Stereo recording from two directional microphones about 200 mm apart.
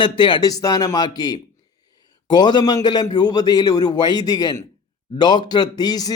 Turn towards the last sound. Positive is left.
turn(degrees=20)  # may be behind; listen again after turning